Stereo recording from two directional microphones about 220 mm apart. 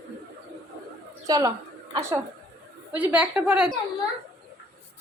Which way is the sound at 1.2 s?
15° right (ahead or behind).